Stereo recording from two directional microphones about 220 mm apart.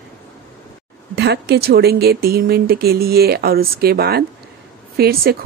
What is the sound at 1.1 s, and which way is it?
Speech, 50° right (ahead or behind).